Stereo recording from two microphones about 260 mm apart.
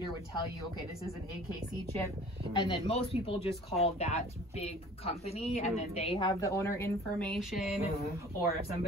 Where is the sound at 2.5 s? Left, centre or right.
Left; by 7.7 s centre.